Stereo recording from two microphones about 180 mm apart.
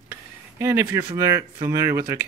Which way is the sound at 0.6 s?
15° right (ahead or behind).